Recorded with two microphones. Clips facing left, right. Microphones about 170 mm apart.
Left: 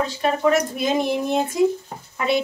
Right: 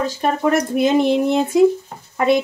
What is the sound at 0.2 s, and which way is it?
Speech, 60° right (ahead or behind).